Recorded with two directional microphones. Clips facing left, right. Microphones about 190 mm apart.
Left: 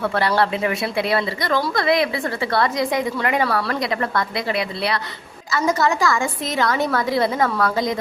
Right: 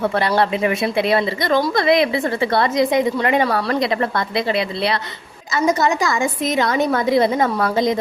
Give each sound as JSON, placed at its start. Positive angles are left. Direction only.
{"t": 0.0, "sound": "speech", "side_deg": -20}